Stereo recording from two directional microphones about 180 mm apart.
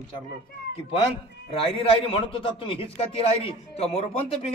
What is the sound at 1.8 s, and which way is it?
A man's voice, 30° left (ahead or behind).